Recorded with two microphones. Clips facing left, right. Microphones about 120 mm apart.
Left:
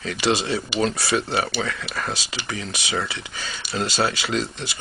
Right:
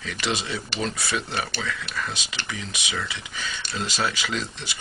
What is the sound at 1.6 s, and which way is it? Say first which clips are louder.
Speech: left 3 dB; 45° left (ahead or behind).